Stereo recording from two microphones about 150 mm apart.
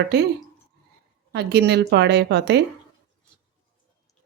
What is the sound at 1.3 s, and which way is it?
Speech, 90° right.